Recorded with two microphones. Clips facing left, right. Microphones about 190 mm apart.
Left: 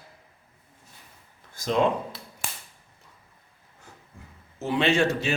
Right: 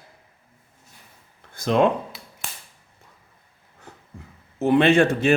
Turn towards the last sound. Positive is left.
turn(degrees=-55)  # may be behind; listen again after turning